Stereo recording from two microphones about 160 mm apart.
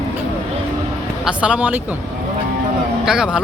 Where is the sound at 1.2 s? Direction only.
5° right (ahead or behind).